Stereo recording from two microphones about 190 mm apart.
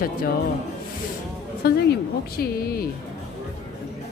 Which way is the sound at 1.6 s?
55° left (ahead or behind).